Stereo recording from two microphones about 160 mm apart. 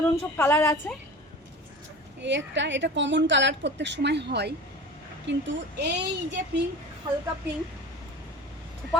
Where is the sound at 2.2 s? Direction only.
90° right.